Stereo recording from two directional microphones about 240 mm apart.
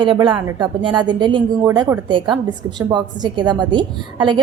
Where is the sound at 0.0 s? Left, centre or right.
Centre.